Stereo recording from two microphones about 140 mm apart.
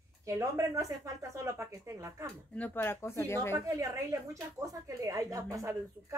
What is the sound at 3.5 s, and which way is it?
Speech, 25° right (ahead or behind).